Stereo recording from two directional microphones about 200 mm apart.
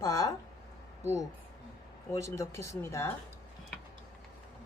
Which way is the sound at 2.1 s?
15° left (ahead or behind).